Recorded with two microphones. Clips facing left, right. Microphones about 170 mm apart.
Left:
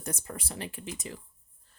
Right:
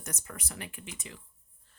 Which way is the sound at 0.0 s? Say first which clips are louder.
Left 5 dB; 30° left (ahead or behind).